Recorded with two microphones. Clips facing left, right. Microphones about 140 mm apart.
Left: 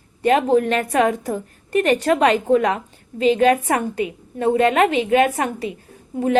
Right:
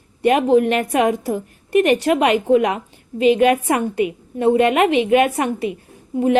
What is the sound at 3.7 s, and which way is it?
Speech, 35° left (ahead or behind).